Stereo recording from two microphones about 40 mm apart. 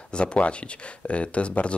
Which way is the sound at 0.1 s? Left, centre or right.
Left.